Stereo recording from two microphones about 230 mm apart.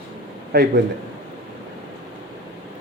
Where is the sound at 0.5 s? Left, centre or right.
Right.